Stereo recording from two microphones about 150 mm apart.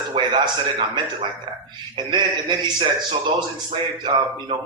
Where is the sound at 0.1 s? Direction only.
40° right (ahead or behind).